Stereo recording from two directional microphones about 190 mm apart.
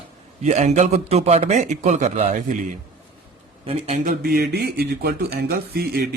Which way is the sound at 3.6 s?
35° right (ahead or behind).